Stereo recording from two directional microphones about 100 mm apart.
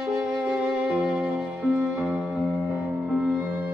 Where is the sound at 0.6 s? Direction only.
10° right (ahead or behind).